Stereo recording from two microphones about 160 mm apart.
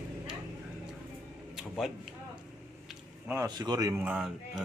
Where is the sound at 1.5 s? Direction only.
Centre (ahead or behind).